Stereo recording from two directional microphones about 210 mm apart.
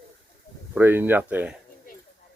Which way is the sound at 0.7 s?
10° right (ahead or behind).